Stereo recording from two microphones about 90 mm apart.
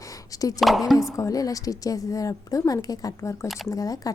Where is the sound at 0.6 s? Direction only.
Centre (ahead or behind).